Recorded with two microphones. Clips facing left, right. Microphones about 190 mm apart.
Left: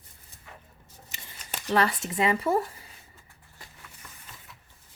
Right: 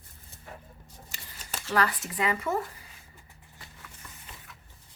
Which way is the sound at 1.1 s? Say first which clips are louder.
Left 1 dB; 20° left (ahead or behind).